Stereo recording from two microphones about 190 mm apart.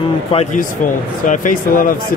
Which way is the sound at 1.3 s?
45° left (ahead or behind).